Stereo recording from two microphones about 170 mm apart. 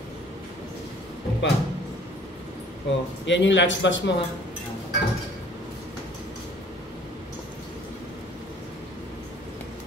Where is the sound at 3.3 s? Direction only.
90° left.